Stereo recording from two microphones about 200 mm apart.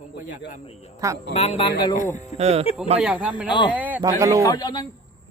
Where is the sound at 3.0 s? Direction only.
5° right (ahead or behind).